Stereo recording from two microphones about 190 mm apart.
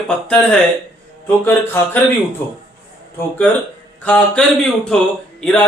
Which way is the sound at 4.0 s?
5° left (ahead or behind).